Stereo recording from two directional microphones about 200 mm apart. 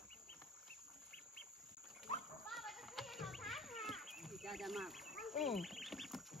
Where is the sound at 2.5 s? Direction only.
Centre (ahead or behind).